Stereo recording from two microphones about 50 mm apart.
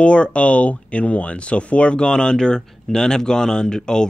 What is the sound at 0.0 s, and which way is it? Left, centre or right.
Speech, left.